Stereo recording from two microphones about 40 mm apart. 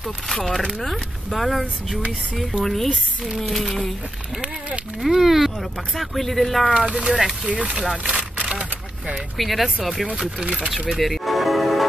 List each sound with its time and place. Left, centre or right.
0.3 s speech: centre
5.0 s speech: centre
6.9 s speech: centre
8.5 s a sound: centre
9.4 s speech: centre
10.7 s music: centre